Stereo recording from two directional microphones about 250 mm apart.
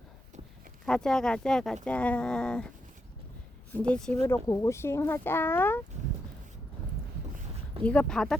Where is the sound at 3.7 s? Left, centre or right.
Centre.